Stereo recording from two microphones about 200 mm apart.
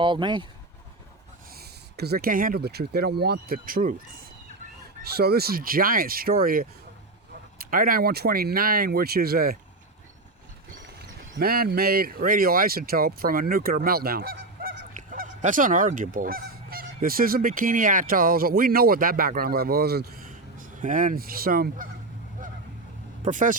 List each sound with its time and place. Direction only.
0.0 s speech: 25° right (ahead or behind)
1.5 s speech: 50° right (ahead or behind)
11.3 s speech: 50° right (ahead or behind)
14.9 s goose: 40° right (ahead or behind)
23.2 s speech: 40° right (ahead or behind)